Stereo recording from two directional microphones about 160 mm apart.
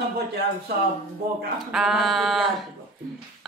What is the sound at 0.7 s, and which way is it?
Speech, 75° right (ahead or behind).